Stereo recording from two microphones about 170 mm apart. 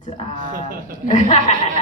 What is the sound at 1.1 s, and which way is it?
Speech, 45° left (ahead or behind).